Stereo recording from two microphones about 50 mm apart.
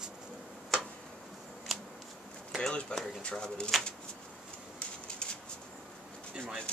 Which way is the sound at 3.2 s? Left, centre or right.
Centre.